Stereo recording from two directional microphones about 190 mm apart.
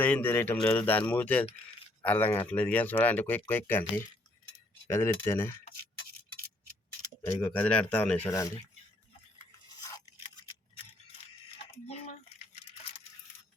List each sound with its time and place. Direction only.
0.0 s speech: 10° left (ahead or behind)
7.4 s speech: 10° left (ahead or behind)